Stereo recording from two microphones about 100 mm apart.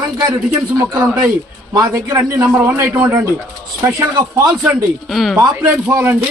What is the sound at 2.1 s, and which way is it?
A man's voice, 30° right (ahead or behind).